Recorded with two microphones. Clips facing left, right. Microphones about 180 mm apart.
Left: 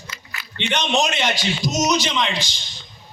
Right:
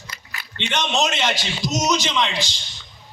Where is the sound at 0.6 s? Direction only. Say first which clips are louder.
Left 2 dB; 15° left (ahead or behind).